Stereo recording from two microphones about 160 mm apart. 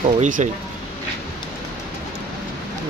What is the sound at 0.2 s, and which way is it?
Speech, 50° right (ahead or behind).